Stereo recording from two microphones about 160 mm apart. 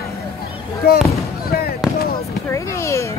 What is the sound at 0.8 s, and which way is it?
Fireworks, 75° left (ahead or behind).